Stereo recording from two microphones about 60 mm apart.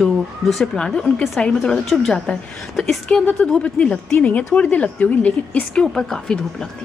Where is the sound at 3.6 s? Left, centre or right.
Centre.